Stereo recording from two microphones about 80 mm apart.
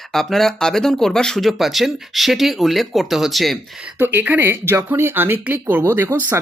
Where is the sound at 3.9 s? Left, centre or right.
Right.